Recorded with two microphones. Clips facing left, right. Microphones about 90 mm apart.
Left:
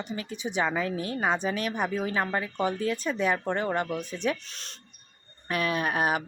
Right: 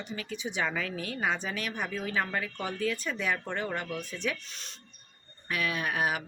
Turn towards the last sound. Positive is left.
turn(degrees=35)  # may be behind; listen again after turning